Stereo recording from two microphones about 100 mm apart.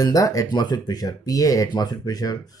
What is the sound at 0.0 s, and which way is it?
Speech, 35° left (ahead or behind).